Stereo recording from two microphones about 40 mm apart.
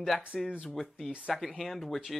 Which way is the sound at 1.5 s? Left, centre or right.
Centre.